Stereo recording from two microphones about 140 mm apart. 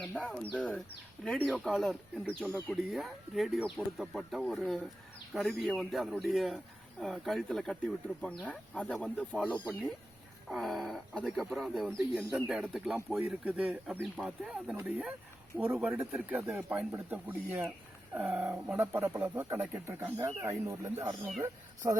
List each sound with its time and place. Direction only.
0.2 s speech: 5° left (ahead or behind)
2.2 s speech: 15° right (ahead or behind)
2.6 s speech: centre (ahead or behind); by 20.9 s 20° right (ahead or behind)
21.0 s speech: 30° right (ahead or behind)